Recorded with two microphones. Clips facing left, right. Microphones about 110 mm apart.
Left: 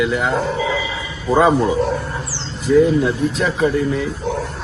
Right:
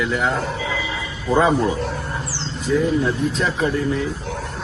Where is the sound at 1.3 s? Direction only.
10° left (ahead or behind).